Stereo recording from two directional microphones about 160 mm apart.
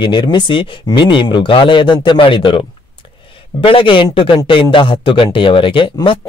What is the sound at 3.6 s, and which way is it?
Speech, 35° left (ahead or behind).